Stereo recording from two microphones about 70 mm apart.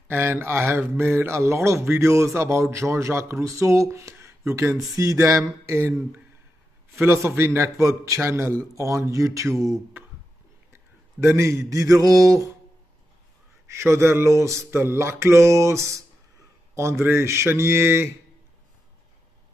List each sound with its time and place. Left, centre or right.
0.1 s speech: right
4.9 s music: right
7.0 s speech: right
8.7 s music: right
11.2 s music: right
13.7 s music: right
17.0 s speech: right